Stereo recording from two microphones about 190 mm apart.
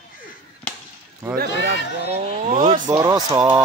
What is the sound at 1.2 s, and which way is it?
Speech, 10° right (ahead or behind).